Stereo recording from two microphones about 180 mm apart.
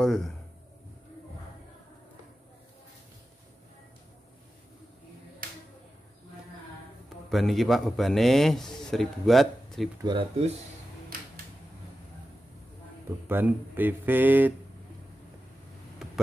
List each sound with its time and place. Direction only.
0.0 s a man's voice: centre (ahead or behind)
7.2 s a man's voice: centre (ahead or behind)
10.0 s speech: 30° right (ahead or behind)
13.3 s speech: 10° right (ahead or behind)